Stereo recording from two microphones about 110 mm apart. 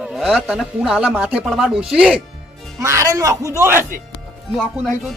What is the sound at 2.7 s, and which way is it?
Speech, 30° right (ahead or behind).